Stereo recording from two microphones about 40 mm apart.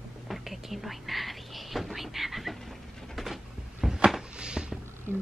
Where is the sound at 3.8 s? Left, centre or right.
Centre.